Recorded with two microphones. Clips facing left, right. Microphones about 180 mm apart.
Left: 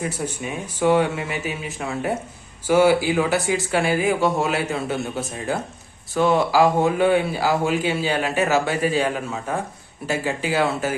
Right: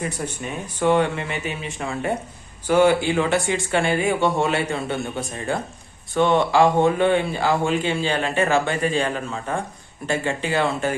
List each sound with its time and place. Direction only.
0.0 s speech: 5° left (ahead or behind)